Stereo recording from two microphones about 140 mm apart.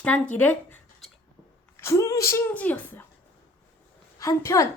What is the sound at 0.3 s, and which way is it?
Speech, 10° left (ahead or behind).